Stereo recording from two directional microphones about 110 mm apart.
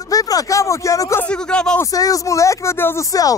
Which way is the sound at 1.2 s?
10° left (ahead or behind).